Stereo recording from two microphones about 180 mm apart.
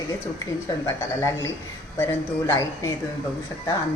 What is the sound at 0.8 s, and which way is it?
Speech, 15° left (ahead or behind).